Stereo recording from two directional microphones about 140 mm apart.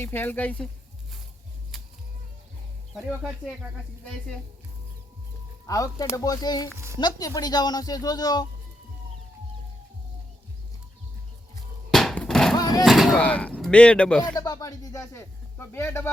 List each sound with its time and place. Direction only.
0.0 s speech: 15° left (ahead or behind)
1.7 s music: centre (ahead or behind)
5.6 s speech: 25° left (ahead or behind)
6.7 s speech: 20° right (ahead or behind)
7.0 s speech: 25° left (ahead or behind)
11.9 s a sound: 5° left (ahead or behind)
12.5 s a sound: 30° left (ahead or behind)
12.8 s speech: centre (ahead or behind)
13.2 s speech: 10° left (ahead or behind)
14.3 s speech: 25° left (ahead or behind)